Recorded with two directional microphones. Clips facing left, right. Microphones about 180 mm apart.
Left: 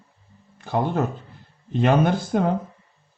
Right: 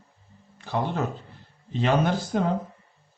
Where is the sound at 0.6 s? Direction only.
50° left (ahead or behind).